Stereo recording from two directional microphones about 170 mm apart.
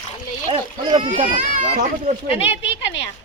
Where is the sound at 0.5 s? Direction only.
35° right (ahead or behind).